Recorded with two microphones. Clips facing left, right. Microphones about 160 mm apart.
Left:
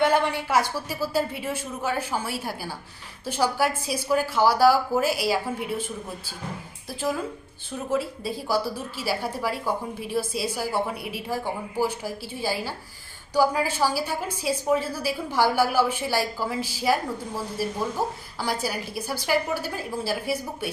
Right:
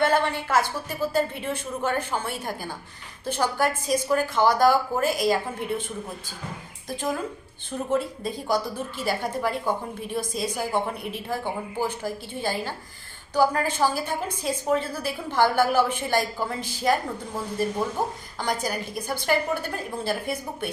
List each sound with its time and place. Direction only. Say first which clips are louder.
0.0 s a woman's voice: left 1 dB; 15° left (ahead or behind)
7.9 s a woman's voice: even; 5° left (ahead or behind)